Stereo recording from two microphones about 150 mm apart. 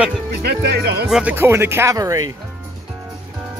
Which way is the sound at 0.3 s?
90° right.